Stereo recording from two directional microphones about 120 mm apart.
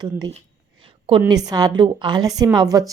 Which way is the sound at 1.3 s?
30° right (ahead or behind).